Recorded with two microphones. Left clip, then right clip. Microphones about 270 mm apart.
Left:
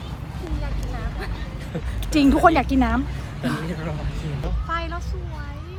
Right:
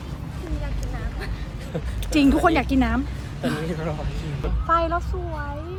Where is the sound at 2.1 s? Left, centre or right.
Centre.